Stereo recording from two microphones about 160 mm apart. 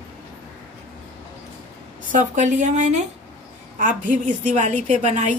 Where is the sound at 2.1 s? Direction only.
50° right (ahead or behind).